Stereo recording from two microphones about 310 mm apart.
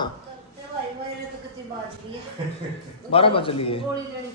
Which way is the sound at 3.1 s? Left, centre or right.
Centre.